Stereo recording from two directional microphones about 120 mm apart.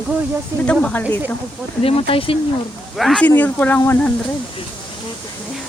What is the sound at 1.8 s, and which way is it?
Speech, 50° left (ahead or behind).